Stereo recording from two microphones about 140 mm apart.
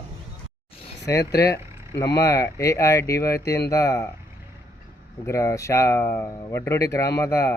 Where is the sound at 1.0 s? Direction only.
20° left (ahead or behind).